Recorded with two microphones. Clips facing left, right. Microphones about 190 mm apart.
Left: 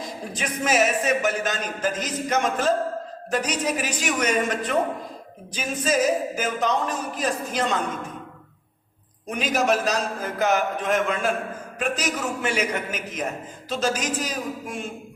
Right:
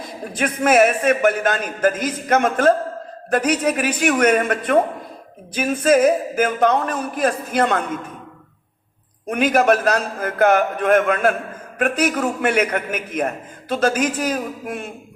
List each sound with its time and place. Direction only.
0.3 s a man's voice: 55° right (ahead or behind)
9.3 s a man's voice: 55° right (ahead or behind)